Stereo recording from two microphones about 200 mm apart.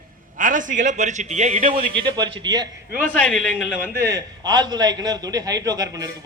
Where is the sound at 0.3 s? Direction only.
40° right (ahead or behind); by 3.0 s 20° right (ahead or behind).